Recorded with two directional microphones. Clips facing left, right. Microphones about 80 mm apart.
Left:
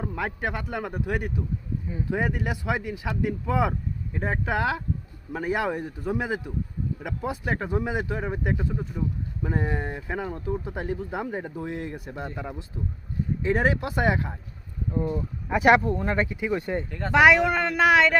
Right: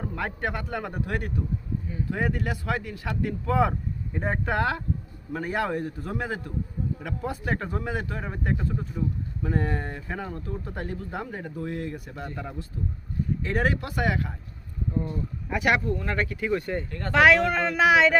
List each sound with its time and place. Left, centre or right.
0.0 s a man's voice: centre
1.9 s speech: centre; by 16.0 s left
16.0 s speech: centre